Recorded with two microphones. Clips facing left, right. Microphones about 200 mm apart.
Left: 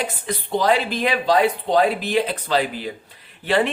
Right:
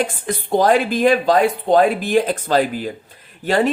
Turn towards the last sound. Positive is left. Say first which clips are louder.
# right 2 dB
turn(degrees=-40)  # may be behind; listen again after turning